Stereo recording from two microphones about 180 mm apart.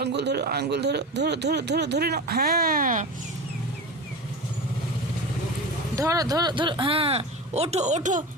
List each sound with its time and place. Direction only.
0.0 s speech: 70° right (ahead or behind); by 3.1 s 45° right (ahead or behind)
6.0 s speech: 20° right (ahead or behind); by 8.2 s 40° right (ahead or behind)